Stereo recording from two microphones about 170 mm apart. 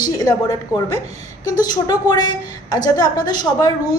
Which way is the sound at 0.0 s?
20° left (ahead or behind).